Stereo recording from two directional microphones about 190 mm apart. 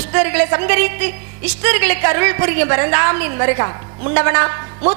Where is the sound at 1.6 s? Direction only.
15° right (ahead or behind).